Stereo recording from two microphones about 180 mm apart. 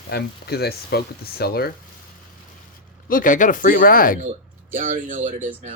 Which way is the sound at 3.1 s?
50° left (ahead or behind).